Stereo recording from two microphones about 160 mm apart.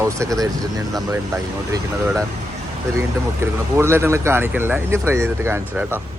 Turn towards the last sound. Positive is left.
turn(degrees=-15)  # may be behind; listen again after turning